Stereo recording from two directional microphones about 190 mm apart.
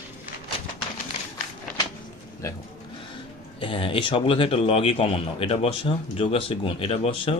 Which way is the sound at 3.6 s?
25° left (ahead or behind).